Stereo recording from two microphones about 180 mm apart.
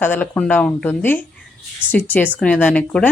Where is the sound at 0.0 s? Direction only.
10° left (ahead or behind).